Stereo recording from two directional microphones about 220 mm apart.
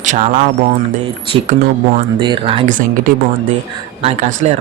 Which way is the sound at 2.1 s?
20° right (ahead or behind).